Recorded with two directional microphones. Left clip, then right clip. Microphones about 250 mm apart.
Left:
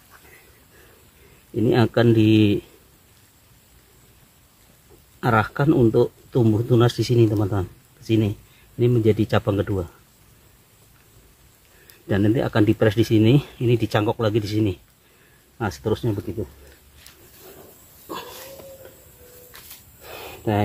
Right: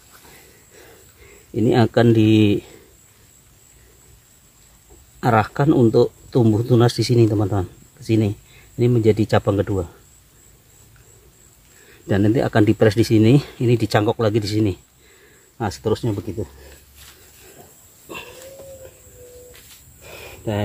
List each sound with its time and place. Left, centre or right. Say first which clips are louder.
1.7 s speech: right 2 dB; right
5.2 s speech: right 2 dB; right
12.1 s speech: right 3 dB; right
20.0 s a sound: left 1 dB; left